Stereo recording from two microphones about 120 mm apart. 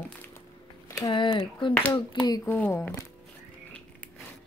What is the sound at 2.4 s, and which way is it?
Speech, 20° left (ahead or behind).